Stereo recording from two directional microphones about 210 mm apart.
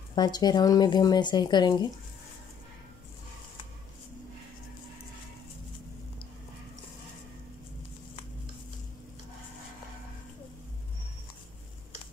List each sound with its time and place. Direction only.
0.1 s speech: 20° left (ahead or behind)